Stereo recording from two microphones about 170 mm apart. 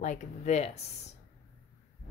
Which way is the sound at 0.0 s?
45° left (ahead or behind).